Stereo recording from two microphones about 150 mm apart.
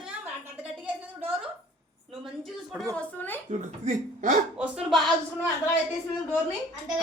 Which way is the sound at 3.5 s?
55° right (ahead or behind).